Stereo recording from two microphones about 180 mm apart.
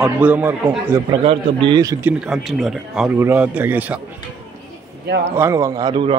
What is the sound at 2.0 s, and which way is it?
A man's voice, 5° right (ahead or behind).